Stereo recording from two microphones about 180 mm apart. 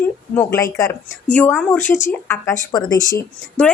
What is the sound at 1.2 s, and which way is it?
Speech, 10° left (ahead or behind).